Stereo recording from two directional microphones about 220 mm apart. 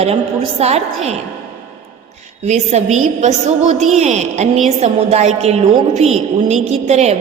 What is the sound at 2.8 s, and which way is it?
A woman's voice, 30° right (ahead or behind).